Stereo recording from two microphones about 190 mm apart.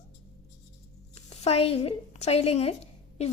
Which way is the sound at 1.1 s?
35° left (ahead or behind).